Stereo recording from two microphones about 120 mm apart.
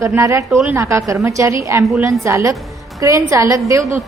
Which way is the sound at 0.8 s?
20° right (ahead or behind).